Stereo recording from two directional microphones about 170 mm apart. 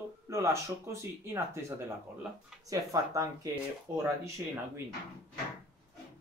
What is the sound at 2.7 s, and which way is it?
Speech, 20° right (ahead or behind).